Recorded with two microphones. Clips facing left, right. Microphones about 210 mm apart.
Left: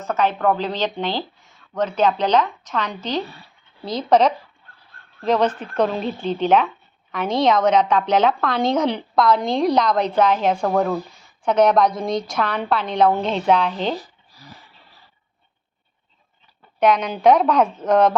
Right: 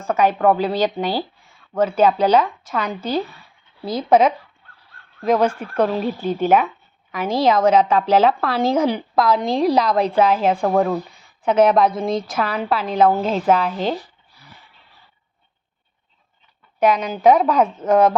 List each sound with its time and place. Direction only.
0.0 s a woman's voice: 10° right (ahead or behind)
14.0 s a sound: 35° left (ahead or behind)
16.8 s speech: 5° right (ahead or behind)